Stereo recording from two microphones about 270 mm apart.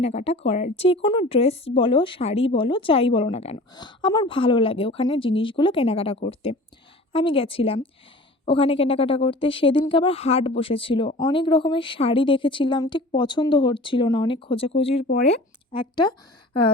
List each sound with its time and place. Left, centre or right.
0.0 s a woman's voice: left